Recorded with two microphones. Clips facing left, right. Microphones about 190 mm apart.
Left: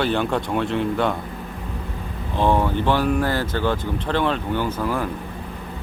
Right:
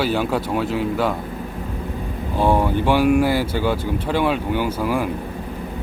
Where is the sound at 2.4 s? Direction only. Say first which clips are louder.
Right 1 dB; 10° right (ahead or behind).